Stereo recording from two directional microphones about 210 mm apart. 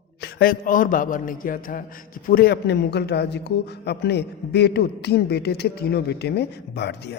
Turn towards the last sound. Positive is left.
turn(degrees=55)  # may be behind; listen again after turning